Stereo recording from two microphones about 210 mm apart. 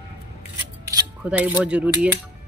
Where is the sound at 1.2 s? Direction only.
5° right (ahead or behind).